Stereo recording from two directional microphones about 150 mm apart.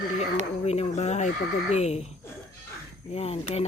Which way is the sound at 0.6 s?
45° left (ahead or behind).